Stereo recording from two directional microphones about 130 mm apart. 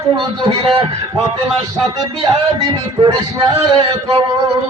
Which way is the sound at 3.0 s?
30° right (ahead or behind).